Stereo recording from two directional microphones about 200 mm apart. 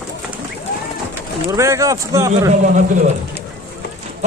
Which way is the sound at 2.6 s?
40° right (ahead or behind).